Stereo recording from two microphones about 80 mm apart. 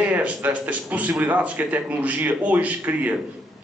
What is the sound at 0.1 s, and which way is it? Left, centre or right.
A man's voice, centre.